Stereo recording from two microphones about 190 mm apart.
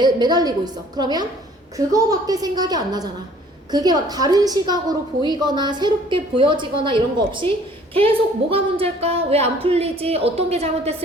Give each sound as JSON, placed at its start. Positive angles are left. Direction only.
{"t": 0.0, "sound": "a woman's voice", "side_deg": -20}